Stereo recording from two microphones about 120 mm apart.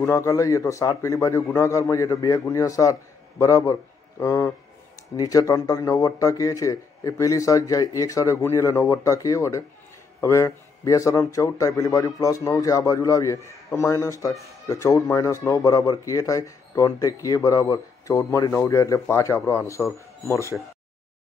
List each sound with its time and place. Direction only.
0.0 s speech: 25° left (ahead or behind)